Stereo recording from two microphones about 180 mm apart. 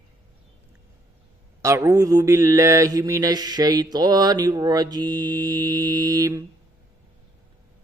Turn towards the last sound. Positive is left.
turn(degrees=-20)  # may be behind; listen again after turning